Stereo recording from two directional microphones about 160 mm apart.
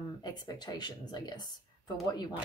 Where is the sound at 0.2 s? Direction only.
25° left (ahead or behind).